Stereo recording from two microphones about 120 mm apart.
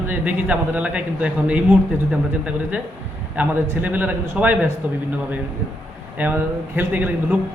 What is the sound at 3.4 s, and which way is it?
A man's voice, 15° right (ahead or behind).